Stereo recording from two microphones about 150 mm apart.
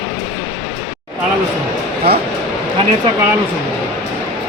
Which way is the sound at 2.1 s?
90° right.